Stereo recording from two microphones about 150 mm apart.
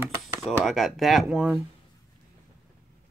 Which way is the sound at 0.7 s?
Centre (ahead or behind).